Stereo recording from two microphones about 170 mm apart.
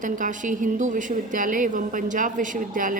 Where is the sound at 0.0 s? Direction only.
50° right (ahead or behind).